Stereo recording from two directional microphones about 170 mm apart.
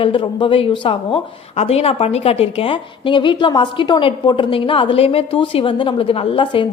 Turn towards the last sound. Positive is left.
turn(degrees=30)  # may be behind; listen again after turning